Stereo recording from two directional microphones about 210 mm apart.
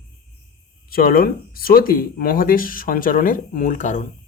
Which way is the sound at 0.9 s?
45° left (ahead or behind).